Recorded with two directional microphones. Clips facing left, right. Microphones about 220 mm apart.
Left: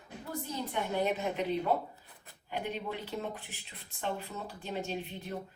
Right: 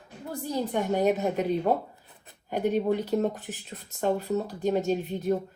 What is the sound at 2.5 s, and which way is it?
Speech, 45° right (ahead or behind).